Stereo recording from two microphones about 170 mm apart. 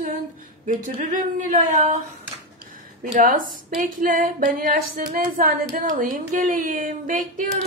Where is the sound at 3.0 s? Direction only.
55° right (ahead or behind).